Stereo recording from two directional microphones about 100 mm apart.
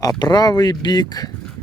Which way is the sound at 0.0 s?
40° left (ahead or behind).